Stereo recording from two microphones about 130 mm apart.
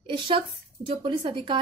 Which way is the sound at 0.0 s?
45° right (ahead or behind).